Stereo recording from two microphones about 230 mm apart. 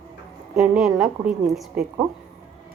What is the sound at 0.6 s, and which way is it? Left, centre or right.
A woman's voice, centre.